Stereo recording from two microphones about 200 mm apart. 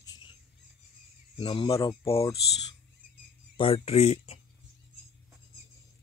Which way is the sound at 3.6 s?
30° left (ahead or behind).